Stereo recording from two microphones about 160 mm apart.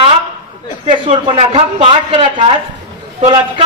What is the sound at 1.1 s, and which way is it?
A man's voice, 35° right (ahead or behind).